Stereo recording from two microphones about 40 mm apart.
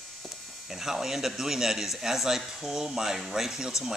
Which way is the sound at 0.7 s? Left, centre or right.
Centre.